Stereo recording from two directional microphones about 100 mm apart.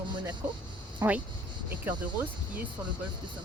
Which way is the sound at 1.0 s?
30° right (ahead or behind).